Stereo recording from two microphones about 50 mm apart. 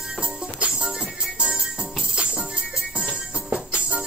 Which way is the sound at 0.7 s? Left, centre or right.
Centre.